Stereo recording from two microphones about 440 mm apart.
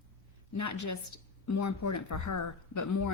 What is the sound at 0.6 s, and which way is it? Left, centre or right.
Speech, left.